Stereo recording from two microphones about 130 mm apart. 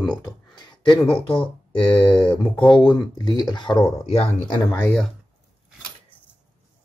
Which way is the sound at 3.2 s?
35° left (ahead or behind).